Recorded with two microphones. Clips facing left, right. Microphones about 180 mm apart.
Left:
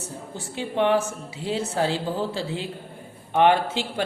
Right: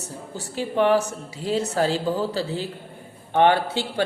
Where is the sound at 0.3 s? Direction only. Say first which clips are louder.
Right 2 dB; 40° right (ahead or behind).